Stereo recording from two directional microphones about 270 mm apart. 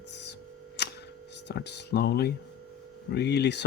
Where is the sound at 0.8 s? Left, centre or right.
Left.